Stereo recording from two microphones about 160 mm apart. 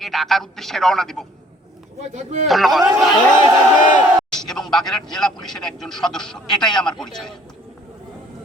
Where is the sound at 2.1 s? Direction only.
45° right (ahead or behind).